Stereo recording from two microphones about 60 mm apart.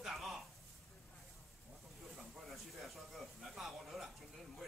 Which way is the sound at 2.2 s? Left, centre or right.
Centre.